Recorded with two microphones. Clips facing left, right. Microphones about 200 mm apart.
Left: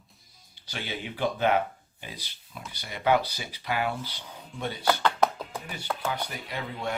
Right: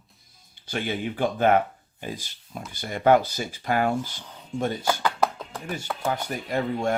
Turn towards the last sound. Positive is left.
turn(degrees=-50)  # may be behind; listen again after turning